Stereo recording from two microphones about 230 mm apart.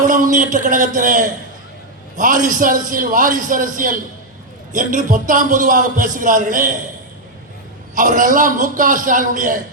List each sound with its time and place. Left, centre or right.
0.0 s a man's voice: right
7.9 s a man's voice: right